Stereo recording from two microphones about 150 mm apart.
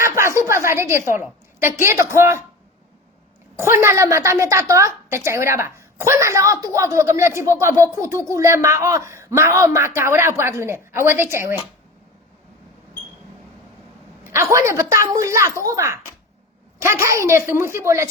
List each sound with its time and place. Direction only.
0.0 s a sound: 20° right (ahead or behind)
3.5 s a woman's voice: 15° right (ahead or behind)
14.3 s a woman's voice: 20° right (ahead or behind)